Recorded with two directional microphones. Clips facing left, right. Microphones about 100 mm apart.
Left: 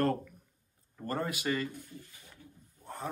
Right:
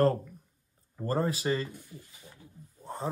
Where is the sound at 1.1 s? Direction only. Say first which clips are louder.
Right 4 dB; 30° right (ahead or behind).